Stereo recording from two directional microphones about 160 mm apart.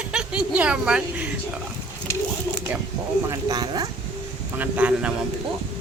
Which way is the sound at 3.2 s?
25° right (ahead or behind).